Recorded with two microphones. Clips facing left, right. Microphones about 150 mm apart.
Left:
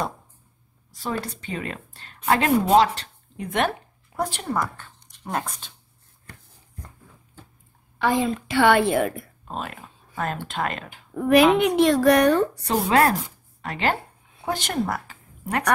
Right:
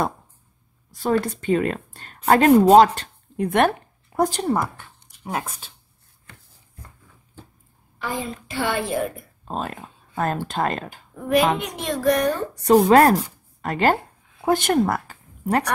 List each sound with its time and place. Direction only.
0.9 s speech: 55° right (ahead or behind)
4.2 s a woman's voice: 40° right (ahead or behind)
4.7 s speech: 10° right (ahead or behind)
8.0 s a woman's voice: 85° left
9.4 s speech: 35° right (ahead or behind)
11.1 s a woman's voice: 70° left (ahead or behind)
12.6 s speech: 45° right (ahead or behind)